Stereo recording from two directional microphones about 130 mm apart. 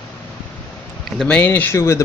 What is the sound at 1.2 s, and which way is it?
Speech, 10° left (ahead or behind).